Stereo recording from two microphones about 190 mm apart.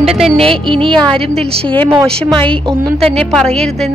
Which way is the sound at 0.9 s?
5° left (ahead or behind).